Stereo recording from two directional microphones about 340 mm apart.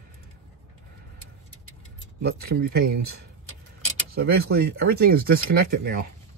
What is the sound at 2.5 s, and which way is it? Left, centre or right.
Speech, right.